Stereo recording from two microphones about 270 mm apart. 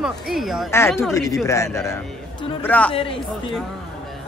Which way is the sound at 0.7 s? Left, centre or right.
Centre.